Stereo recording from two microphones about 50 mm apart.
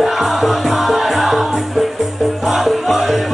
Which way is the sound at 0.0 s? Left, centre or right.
Centre.